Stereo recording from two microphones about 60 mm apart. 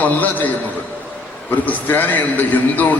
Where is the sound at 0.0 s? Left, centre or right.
Left.